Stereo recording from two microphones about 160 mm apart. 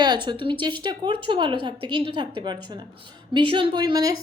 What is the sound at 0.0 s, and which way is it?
A woman's voice, 25° right (ahead or behind).